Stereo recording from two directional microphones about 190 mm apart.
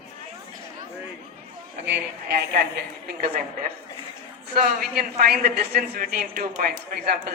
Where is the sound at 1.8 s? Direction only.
60° right (ahead or behind).